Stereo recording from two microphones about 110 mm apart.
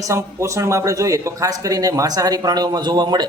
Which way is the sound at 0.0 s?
30° right (ahead or behind).